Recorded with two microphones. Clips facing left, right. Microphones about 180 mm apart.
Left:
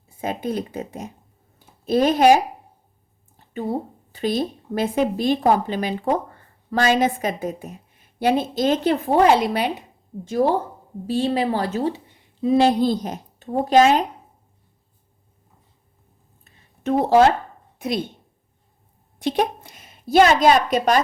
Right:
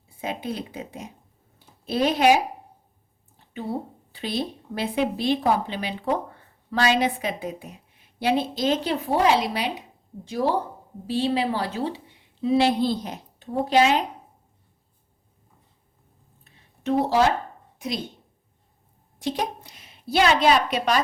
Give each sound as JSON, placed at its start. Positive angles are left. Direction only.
{"t": 0.2, "sound": "a woman's voice", "side_deg": 45}
{"t": 1.5, "sound": "a sound", "side_deg": 45}
{"t": 4.1, "sound": "a woman's voice", "side_deg": 45}
{"t": 16.4, "sound": "a sound", "side_deg": 50}
{"t": 17.7, "sound": "a woman's voice", "side_deg": 60}
{"t": 19.2, "sound": "a woman's voice", "side_deg": 55}